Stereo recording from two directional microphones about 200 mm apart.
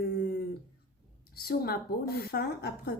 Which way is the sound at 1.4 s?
50° left (ahead or behind).